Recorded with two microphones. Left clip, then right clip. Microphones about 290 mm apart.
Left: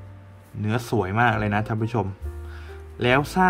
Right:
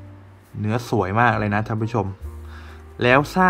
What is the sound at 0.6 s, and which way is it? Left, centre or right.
Speech, centre.